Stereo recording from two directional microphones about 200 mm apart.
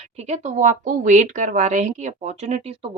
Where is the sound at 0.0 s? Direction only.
35° right (ahead or behind).